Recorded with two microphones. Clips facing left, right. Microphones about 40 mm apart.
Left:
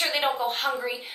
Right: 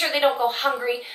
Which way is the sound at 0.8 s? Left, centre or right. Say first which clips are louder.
Right 5 dB; centre.